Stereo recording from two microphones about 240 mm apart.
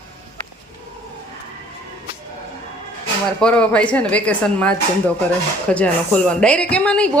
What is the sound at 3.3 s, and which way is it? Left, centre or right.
A woman's voice, centre.